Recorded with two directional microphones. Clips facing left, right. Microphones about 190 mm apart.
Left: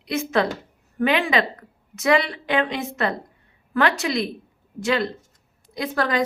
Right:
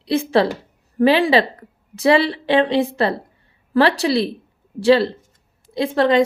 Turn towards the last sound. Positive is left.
turn(degrees=-25)  # may be behind; listen again after turning